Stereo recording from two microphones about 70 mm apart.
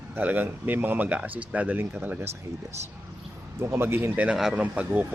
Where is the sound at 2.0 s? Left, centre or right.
Right.